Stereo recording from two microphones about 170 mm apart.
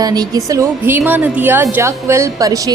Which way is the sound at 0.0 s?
20° right (ahead or behind).